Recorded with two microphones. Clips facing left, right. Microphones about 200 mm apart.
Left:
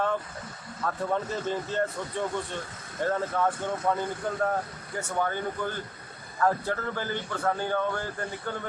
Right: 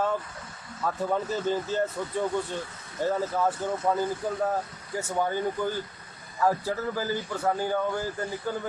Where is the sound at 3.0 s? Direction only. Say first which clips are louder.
Right 1 dB; 5° right (ahead or behind).